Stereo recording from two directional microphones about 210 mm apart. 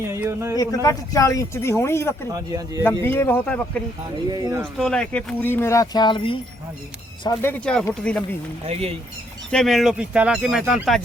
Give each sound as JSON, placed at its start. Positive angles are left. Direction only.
{"t": 0.1, "sound": "speech", "side_deg": -10}
{"t": 0.5, "sound": "speech", "side_deg": 15}
{"t": 2.3, "sound": "speech", "side_deg": -15}
{"t": 2.8, "sound": "speech", "side_deg": 10}
{"t": 4.3, "sound": "speech", "side_deg": -15}
{"t": 4.8, "sound": "speech", "side_deg": 5}
{"t": 7.3, "sound": "speech", "side_deg": 10}
{"t": 8.6, "sound": "speech", "side_deg": -30}
{"t": 9.5, "sound": "speech", "side_deg": 0}